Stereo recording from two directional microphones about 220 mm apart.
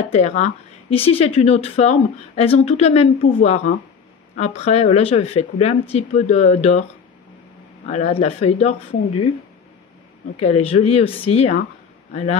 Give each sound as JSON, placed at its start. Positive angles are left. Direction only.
{"t": 0.1, "sound": "speech", "side_deg": 30}
{"t": 7.8, "sound": "speech", "side_deg": 30}
{"t": 10.4, "sound": "speech", "side_deg": 25}